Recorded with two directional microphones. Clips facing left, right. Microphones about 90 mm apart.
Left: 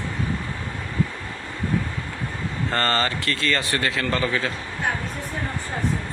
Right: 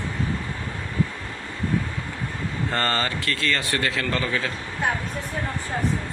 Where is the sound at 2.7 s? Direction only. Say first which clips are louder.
Left 2 dB; 10° right (ahead or behind).